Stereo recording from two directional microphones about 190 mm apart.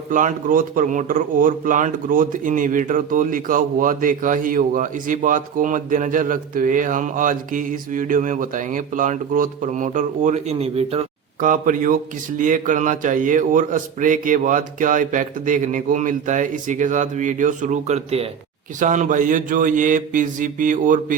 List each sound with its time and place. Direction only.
0.1 s speech: 45° right (ahead or behind)